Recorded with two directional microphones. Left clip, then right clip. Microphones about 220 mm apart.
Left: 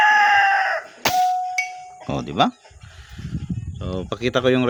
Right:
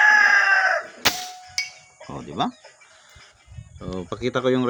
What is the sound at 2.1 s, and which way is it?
Speech, 45° left (ahead or behind).